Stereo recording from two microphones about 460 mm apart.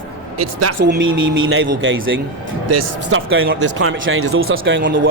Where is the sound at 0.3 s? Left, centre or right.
Right.